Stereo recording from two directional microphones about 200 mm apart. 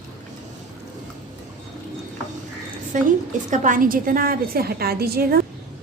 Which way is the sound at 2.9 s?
40° right (ahead or behind).